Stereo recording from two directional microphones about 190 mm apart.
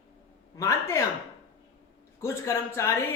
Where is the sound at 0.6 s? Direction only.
15° left (ahead or behind).